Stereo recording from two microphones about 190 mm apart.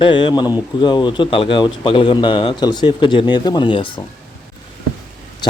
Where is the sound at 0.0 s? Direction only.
25° left (ahead or behind).